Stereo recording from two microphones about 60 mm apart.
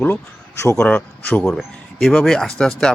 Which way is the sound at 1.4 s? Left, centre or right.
Centre.